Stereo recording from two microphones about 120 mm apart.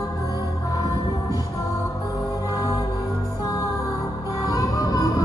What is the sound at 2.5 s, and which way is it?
Music, 30° left (ahead or behind).